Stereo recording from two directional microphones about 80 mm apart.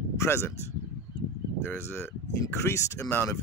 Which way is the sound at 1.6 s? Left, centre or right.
Left.